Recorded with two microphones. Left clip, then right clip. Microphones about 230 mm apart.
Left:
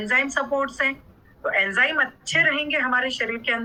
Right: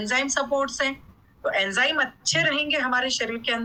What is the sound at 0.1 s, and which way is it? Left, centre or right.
Speech, centre.